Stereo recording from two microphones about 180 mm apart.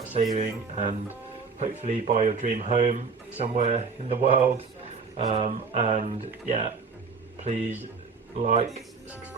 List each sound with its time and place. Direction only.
0.3 s a man's voice: 45° right (ahead or behind)